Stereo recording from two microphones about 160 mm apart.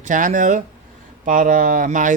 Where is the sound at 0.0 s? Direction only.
55° right (ahead or behind).